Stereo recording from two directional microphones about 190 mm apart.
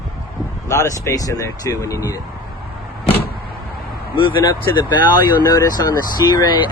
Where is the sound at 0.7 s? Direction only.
15° left (ahead or behind).